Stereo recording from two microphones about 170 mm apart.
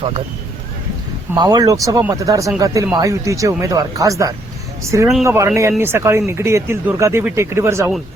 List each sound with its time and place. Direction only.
1.4 s speech: 20° right (ahead or behind)